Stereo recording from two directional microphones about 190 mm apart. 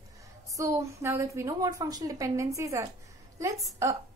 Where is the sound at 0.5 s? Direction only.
15° right (ahead or behind).